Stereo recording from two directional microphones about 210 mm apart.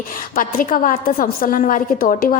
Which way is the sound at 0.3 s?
40° left (ahead or behind).